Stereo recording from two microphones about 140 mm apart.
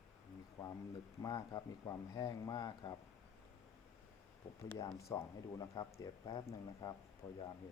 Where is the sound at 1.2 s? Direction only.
30° left (ahead or behind).